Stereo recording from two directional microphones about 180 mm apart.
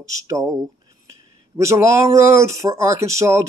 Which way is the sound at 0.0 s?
20° right (ahead or behind).